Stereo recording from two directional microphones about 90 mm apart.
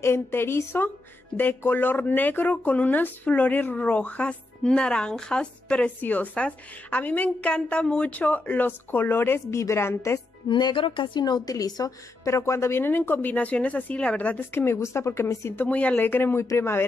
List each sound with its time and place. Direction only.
0.0 s speech: 25° left (ahead or behind)
10.5 s a woman's voice: 60° left (ahead or behind); by 14.4 s 15° left (ahead or behind)
14.5 s speech: 25° left (ahead or behind)
15.6 s speech: 15° left (ahead or behind)